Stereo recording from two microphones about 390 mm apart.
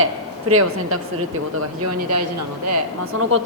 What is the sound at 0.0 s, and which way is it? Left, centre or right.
Speech, right.